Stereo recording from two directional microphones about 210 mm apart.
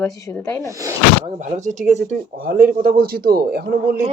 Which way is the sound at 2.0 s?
45° right (ahead or behind).